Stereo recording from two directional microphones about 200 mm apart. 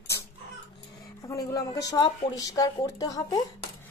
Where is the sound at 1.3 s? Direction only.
15° left (ahead or behind).